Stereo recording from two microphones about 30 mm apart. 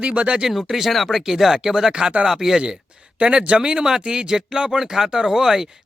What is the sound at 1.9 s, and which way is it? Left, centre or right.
Speech, right.